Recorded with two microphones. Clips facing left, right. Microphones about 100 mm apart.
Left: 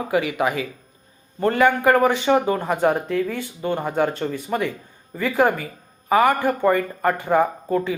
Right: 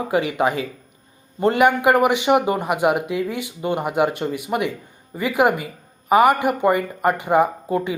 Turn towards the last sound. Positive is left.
turn(degrees=-15)  # may be behind; listen again after turning